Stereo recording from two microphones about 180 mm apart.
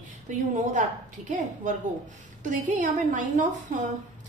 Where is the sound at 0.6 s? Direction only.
45° right (ahead or behind).